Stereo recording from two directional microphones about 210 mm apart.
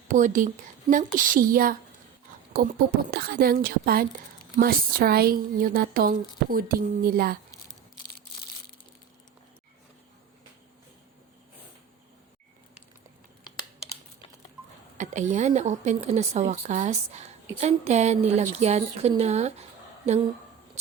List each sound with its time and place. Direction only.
0.1 s a woman's voice: 40° right (ahead or behind)
14.9 s speech: 35° right (ahead or behind)